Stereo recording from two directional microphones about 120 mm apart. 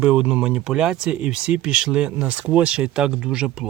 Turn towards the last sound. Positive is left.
turn(degrees=-10)  # may be behind; listen again after turning